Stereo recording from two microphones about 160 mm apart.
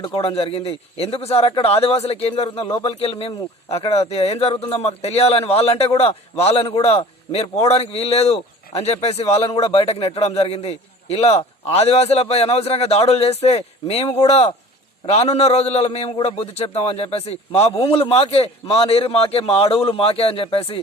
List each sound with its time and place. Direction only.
0.0 s a man's voice: 30° left (ahead or behind)
2.6 s a man's voice: 25° left (ahead or behind); by 14.0 s 40° left (ahead or behind)
15.0 s a man's voice: 45° left (ahead or behind)